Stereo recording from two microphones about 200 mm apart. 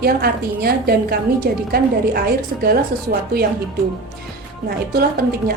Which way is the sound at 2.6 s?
50° right (ahead or behind).